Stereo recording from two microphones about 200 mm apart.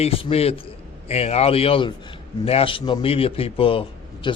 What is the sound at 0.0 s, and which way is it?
A man's voice, 30° left (ahead or behind).